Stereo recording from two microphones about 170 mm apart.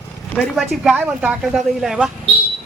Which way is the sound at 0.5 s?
Centre (ahead or behind).